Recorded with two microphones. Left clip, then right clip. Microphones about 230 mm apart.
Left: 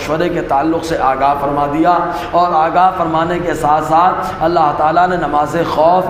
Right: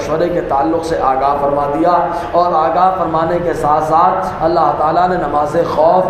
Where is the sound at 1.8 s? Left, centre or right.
Left.